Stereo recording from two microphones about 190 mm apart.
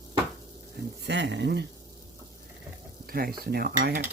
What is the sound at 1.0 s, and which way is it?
Speech, 70° right (ahead or behind).